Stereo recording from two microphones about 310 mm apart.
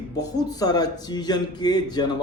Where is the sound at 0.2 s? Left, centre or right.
Centre.